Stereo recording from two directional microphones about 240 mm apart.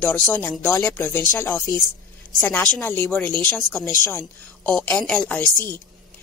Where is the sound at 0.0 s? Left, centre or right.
Centre.